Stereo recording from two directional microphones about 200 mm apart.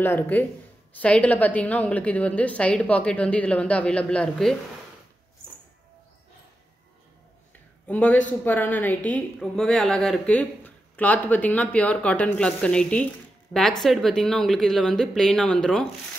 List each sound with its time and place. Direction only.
0.0 s a woman's voice: 10° left (ahead or behind)
7.8 s a woman's voice: 5° left (ahead or behind)